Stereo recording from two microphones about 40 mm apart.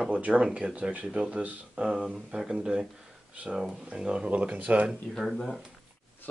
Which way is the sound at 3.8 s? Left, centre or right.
Right.